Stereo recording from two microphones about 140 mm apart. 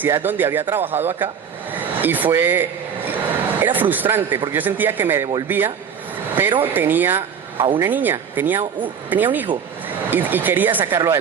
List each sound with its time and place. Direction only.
0.0 s a man's voice: 15° right (ahead or behind)
1.7 s a sound: 15° right (ahead or behind)
3.6 s a man's voice: 15° right (ahead or behind)